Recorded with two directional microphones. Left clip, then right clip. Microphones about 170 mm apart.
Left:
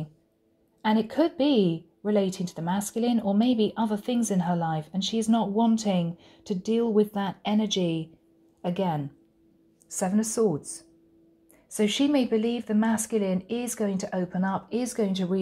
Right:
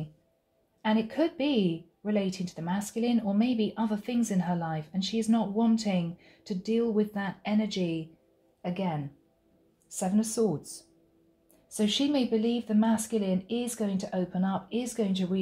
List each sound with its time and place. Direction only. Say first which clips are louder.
0.8 s a woman's voice: left 4 dB; 35° left (ahead or behind); by 9.0 s 55° left (ahead or behind)
10.0 s speech: left 2 dB; 20° left (ahead or behind)
10.3 s a woman's voice: left 4 dB; 30° left (ahead or behind)
11.7 s speech: left 4 dB; 25° left (ahead or behind)
14.5 s speech: left 3 dB; 15° left (ahead or behind)